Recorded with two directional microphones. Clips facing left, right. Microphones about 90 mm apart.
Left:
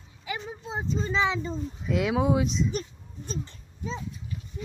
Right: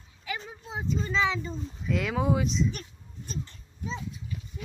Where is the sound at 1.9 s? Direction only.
5° left (ahead or behind).